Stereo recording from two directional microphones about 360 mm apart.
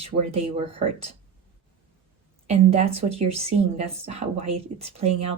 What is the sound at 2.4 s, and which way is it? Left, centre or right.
Speech, centre.